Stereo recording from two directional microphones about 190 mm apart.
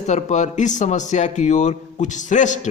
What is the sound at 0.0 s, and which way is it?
A man's voice, 35° left (ahead or behind).